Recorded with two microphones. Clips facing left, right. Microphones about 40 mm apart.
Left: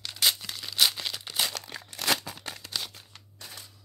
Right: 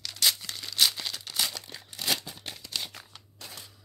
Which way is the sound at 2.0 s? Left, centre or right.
Left.